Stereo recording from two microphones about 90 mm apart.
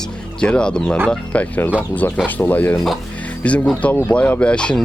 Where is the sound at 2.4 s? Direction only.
20° left (ahead or behind).